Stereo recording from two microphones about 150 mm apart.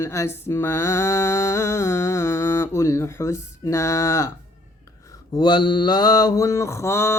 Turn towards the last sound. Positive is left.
turn(degrees=15)  # may be behind; listen again after turning